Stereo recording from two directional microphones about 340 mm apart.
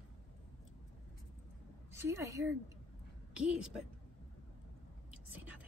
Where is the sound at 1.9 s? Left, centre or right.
Centre.